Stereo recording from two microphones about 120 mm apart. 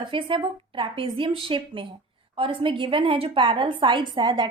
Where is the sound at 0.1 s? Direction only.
45° right (ahead or behind).